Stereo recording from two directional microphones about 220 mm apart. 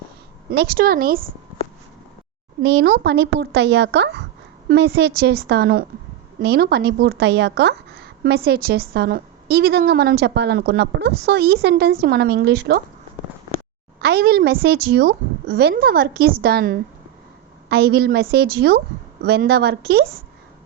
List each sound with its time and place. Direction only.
0.5 s a woman's voice: 45° right (ahead or behind)
2.6 s a woman's voice: 50° right (ahead or behind)
14.0 s a woman's voice: 45° right (ahead or behind)